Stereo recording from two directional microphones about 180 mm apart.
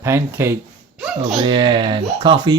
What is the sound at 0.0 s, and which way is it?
Speech, 15° right (ahead or behind).